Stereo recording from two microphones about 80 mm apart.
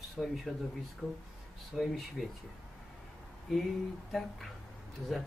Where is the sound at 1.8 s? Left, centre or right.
Centre.